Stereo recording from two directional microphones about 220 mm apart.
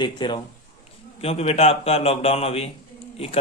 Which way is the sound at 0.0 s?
20° left (ahead or behind).